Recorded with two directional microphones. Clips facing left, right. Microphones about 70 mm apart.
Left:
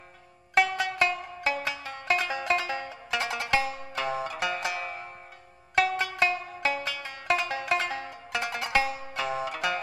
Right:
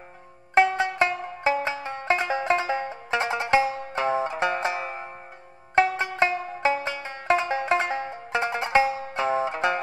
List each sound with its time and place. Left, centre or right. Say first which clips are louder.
0.6 s music: right 4 dB; right